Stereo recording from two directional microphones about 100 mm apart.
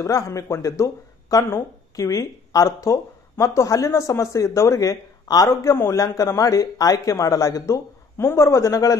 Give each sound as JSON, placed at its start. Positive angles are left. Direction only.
{"t": 0.0, "sound": "speech", "side_deg": 30}